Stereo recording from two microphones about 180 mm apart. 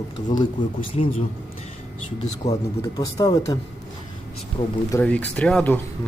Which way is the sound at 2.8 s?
20° left (ahead or behind).